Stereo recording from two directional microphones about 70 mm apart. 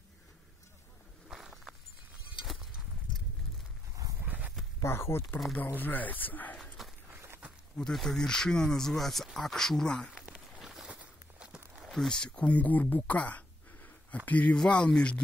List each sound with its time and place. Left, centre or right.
1.3 s walk: centre
2.4 s a sound: centre
4.3 s a sound: right
4.8 s speech: left
5.8 s speech: left
6.5 s dog: centre
7.2 s a sound: right
7.7 s speech: centre
10.1 s a sound: centre
10.6 s walk: centre
11.0 s walk: centre
11.8 s speech: centre